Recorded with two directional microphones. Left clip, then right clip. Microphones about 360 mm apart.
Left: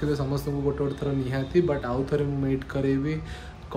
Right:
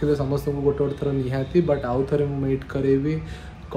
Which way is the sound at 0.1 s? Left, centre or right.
Centre.